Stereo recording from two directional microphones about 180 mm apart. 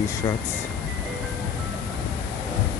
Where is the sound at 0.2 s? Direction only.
20° left (ahead or behind).